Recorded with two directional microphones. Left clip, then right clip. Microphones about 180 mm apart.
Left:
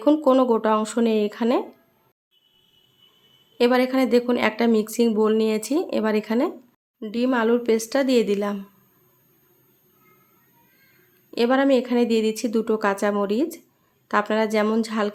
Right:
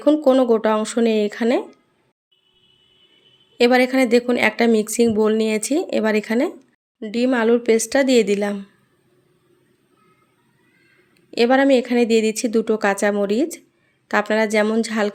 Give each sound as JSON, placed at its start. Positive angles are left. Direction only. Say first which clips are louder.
{"t": 0.0, "sound": "a woman's voice", "louder": "right 3 dB", "side_deg": -10}
{"t": 3.6, "sound": "a woman's voice", "louder": "right 4 dB", "side_deg": -15}
{"t": 11.3, "sound": "a woman's voice", "louder": "right 4 dB", "side_deg": -15}